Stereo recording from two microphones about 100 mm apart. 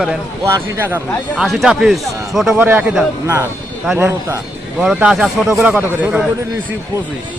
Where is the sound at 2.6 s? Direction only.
20° right (ahead or behind).